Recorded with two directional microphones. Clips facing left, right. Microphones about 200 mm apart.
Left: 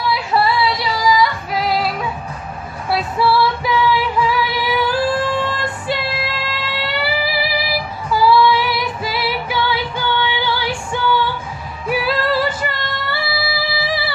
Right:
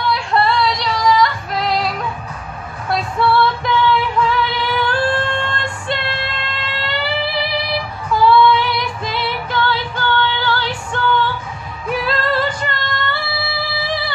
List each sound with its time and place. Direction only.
0.0 s female singing: 5° left (ahead or behind)
2.9 s music: 5° left (ahead or behind)